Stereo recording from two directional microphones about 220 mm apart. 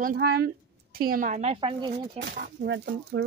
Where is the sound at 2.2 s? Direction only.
40° right (ahead or behind).